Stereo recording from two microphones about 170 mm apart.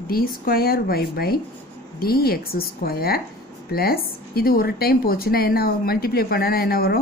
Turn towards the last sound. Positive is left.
turn(degrees=65)  # may be behind; listen again after turning